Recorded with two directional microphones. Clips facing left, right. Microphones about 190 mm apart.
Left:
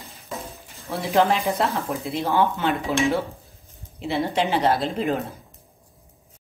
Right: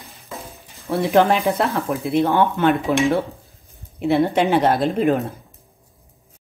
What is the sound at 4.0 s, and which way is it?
A woman's voice, 55° right (ahead or behind).